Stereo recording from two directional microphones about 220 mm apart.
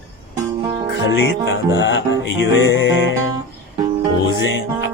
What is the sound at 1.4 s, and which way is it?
Speech, 55° left (ahead or behind).